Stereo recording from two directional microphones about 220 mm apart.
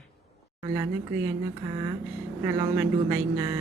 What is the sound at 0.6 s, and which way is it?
Speech, 15° right (ahead or behind).